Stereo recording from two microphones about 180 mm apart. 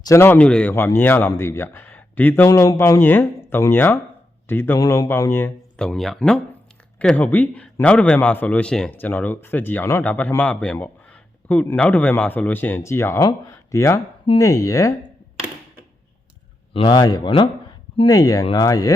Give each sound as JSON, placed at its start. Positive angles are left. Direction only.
{"t": 0.0, "sound": "speech", "side_deg": 15}
{"t": 16.7, "sound": "a man's voice", "side_deg": 25}